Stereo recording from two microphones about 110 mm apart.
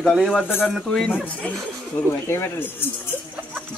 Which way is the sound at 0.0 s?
Centre (ahead or behind).